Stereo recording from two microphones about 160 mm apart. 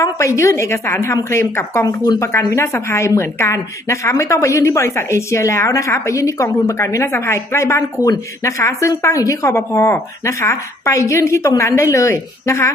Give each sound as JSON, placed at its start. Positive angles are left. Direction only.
{"t": 0.0, "sound": "a woman's voice", "side_deg": 20}